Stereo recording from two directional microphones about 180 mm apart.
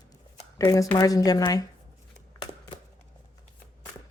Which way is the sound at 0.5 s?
20° left (ahead or behind).